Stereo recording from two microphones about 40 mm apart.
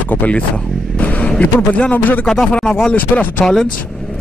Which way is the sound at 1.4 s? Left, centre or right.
Left.